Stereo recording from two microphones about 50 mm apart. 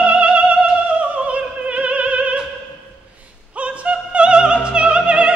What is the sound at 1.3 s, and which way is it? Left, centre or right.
Opera, right.